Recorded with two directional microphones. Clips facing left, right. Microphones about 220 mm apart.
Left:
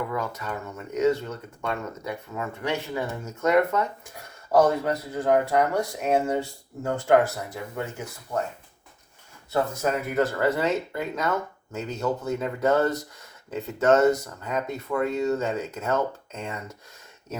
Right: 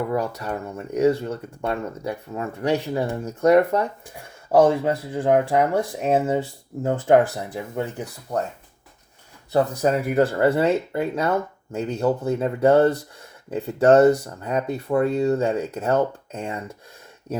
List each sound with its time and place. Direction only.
0.1 s speech: 35° right (ahead or behind)
9.8 s speech: 30° right (ahead or behind)